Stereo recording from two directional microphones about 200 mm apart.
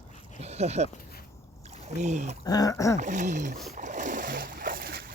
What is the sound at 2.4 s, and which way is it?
Speech, 20° left (ahead or behind).